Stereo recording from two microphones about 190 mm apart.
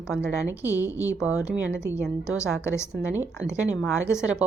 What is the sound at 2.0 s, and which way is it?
Speech, 5° right (ahead or behind).